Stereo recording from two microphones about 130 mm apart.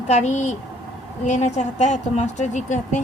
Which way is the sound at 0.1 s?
60° left (ahead or behind).